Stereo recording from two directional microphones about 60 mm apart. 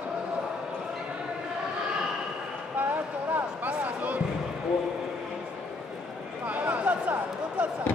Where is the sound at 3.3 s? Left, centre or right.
Right.